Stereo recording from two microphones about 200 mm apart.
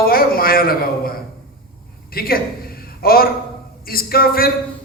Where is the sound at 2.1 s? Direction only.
50° left (ahead or behind).